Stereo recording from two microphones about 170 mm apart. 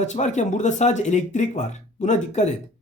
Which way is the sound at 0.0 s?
45° left (ahead or behind).